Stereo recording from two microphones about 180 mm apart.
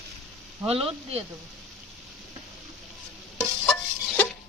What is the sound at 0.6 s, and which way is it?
Speech, 35° right (ahead or behind).